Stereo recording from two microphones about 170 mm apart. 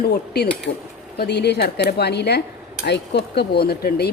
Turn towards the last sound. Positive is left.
turn(degrees=70)  # may be behind; listen again after turning